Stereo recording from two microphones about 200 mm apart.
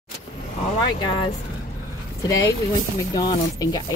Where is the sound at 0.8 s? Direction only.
20° left (ahead or behind).